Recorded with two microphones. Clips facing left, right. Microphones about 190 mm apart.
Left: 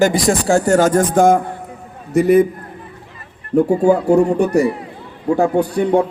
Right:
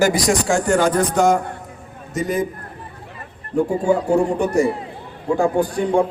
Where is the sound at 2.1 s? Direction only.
65° left (ahead or behind).